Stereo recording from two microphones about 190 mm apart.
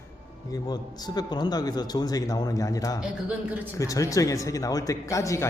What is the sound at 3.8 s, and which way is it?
Speech, 15° left (ahead or behind).